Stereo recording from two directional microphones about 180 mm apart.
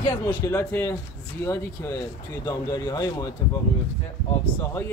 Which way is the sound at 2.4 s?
20° left (ahead or behind).